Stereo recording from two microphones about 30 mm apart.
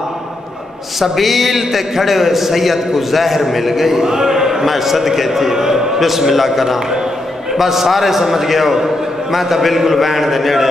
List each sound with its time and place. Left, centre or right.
0.9 s a man's voice: centre
4.6 s a man's voice: centre